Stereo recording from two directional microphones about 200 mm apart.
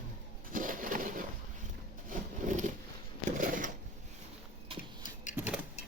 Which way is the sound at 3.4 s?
40° right (ahead or behind).